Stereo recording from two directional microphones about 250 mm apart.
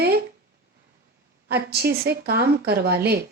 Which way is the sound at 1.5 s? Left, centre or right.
Right.